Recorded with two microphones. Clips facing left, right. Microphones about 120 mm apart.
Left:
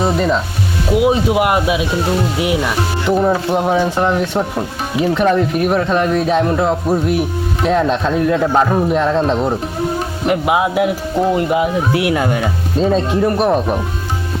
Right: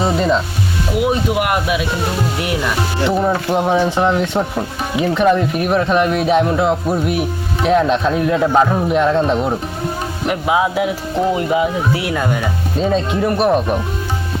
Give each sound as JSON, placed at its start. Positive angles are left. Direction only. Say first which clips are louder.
{"t": 0.0, "sound": "speech", "louder": "even", "side_deg": 5}
{"t": 1.0, "sound": "speech", "louder": "left 3 dB", "side_deg": 20}
{"t": 2.4, "sound": "speech", "louder": "left 3 dB", "side_deg": 10}
{"t": 4.0, "sound": "speech", "louder": "even", "side_deg": 0}
{"t": 10.4, "sound": "speech", "louder": "right 1 dB", "side_deg": 15}
{"t": 11.2, "sound": "speech", "louder": "left 1 dB", "side_deg": 0}
{"t": 12.8, "sound": "speech", "louder": "left 2 dB", "side_deg": 0}